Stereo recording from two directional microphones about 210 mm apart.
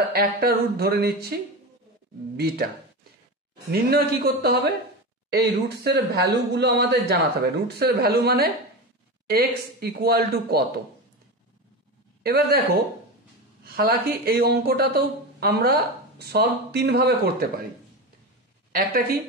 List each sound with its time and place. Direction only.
0.1 s a woman's voice: 45° right (ahead or behind)
3.7 s a woman's voice: 45° right (ahead or behind)
12.2 s a woman's voice: 45° right (ahead or behind)
18.7 s a woman's voice: 45° right (ahead or behind)